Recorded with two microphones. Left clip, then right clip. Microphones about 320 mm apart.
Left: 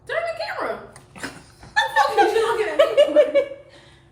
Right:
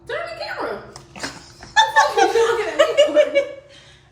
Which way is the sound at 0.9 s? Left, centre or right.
Centre.